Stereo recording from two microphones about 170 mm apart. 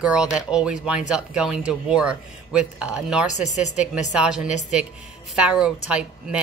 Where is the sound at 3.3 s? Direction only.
45° left (ahead or behind).